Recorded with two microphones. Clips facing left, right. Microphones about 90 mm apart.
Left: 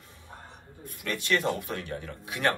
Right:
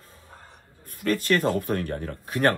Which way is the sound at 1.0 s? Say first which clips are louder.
Right 6 dB; 45° right (ahead or behind).